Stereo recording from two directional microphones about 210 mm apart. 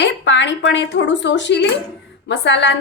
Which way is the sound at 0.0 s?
60° left (ahead or behind).